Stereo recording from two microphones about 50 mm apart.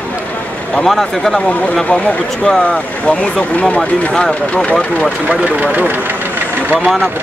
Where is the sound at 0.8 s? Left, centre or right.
Centre.